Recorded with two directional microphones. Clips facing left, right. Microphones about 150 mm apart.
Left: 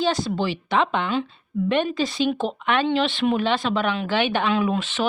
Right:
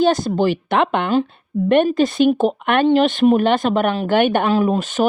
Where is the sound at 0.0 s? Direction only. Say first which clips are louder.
Right 7 dB; 50° right (ahead or behind).